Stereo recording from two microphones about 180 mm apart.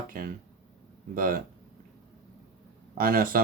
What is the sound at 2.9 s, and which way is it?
Speech, 50° right (ahead or behind).